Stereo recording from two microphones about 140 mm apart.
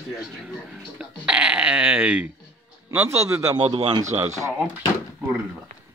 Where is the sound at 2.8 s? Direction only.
20° right (ahead or behind).